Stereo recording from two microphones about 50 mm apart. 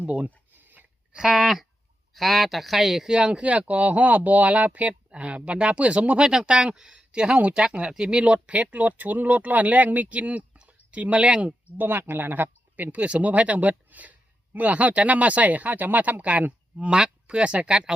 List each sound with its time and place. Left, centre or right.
0.0 s speech: right
1.1 s speech: centre
11.8 s speech: right
16.7 s speech: centre